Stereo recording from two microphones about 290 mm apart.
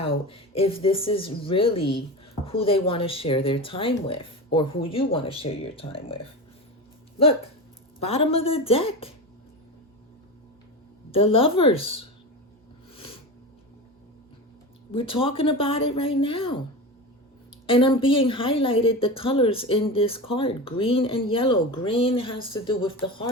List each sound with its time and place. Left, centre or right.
0.3 s a woman's voice: centre
11.1 s a woman's voice: centre
14.9 s a woman's voice: centre
17.7 s a woman's voice: centre